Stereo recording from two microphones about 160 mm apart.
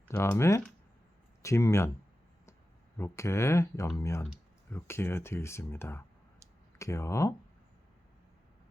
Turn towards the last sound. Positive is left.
turn(degrees=20)  # may be behind; listen again after turning